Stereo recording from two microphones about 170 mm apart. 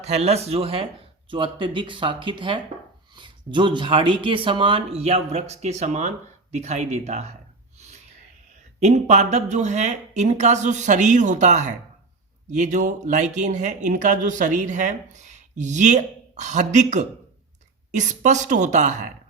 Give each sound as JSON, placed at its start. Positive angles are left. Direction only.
{"t": 0.0, "sound": "speech", "side_deg": -40}
{"t": 8.8, "sound": "speech", "side_deg": -40}